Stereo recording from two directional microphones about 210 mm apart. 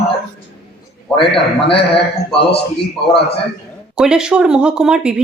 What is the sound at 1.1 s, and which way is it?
Speech, 25° left (ahead or behind).